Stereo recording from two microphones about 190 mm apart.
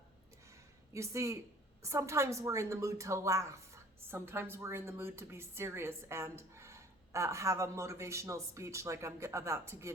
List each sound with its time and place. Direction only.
0.9 s a woman's voice: 15° right (ahead or behind)